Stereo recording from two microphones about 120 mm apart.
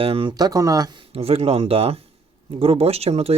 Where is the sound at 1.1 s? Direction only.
55° right (ahead or behind).